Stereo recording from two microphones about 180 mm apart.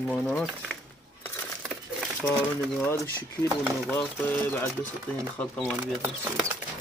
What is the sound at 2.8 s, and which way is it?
Speech, 15° left (ahead or behind).